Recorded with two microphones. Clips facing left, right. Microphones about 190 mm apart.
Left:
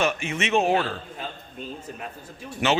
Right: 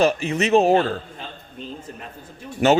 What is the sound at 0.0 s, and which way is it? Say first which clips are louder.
Speech: right 6 dB; 35° right (ahead or behind).